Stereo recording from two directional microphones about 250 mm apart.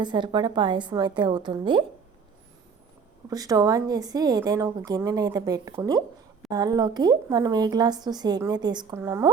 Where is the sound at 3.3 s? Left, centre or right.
Centre.